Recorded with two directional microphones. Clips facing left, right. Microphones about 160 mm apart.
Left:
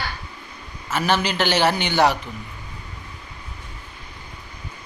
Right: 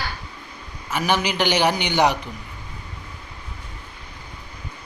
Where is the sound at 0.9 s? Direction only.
15° right (ahead or behind).